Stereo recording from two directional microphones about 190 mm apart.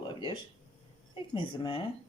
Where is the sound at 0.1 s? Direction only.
25° left (ahead or behind).